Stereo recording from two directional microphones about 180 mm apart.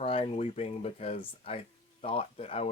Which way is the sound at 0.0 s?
30° left (ahead or behind).